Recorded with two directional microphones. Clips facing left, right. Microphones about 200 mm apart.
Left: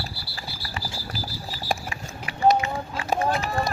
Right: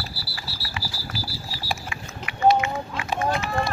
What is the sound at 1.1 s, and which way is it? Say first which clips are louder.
Horse: even; 40° left (ahead or behind).